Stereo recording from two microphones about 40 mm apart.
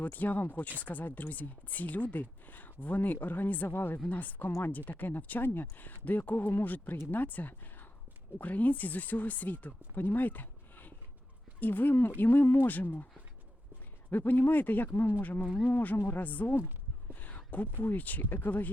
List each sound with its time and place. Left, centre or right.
0.0 s speech: left
3.7 s speech: left
4.1 s speech: left
9.9 s a sound: left
11.6 s speech: left
14.1 s speech: left